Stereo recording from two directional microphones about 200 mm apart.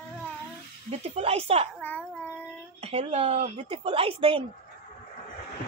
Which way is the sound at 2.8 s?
30° right (ahead or behind).